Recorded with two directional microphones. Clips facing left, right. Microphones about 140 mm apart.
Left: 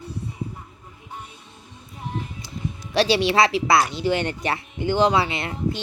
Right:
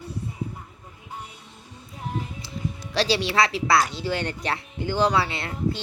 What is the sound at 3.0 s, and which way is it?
Speech, 60° left (ahead or behind).